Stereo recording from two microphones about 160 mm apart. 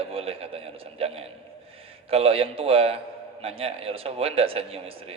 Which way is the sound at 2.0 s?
40° right (ahead or behind).